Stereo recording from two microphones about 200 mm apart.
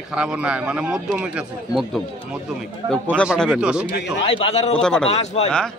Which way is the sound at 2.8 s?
20° right (ahead or behind).